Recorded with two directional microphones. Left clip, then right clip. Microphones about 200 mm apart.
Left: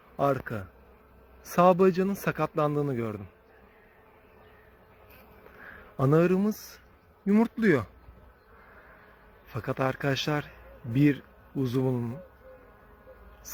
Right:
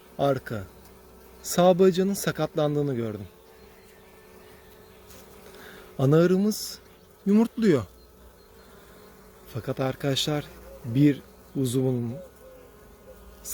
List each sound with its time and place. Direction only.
0.2 s speech: 25° right (ahead or behind)
6.0 s speech: 25° right (ahead or behind)
9.6 s speech: 25° right (ahead or behind)